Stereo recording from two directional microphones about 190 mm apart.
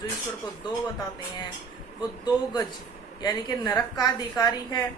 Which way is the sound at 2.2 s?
20° left (ahead or behind).